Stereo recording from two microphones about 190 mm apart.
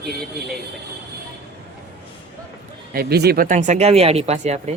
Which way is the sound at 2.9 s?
55° right (ahead or behind).